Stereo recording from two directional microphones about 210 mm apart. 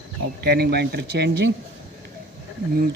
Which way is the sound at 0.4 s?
50° right (ahead or behind).